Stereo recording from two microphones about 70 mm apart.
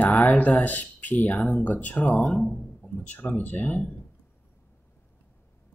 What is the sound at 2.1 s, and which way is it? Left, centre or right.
Speech, centre.